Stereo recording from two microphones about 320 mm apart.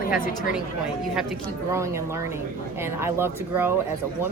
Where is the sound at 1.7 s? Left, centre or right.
Centre.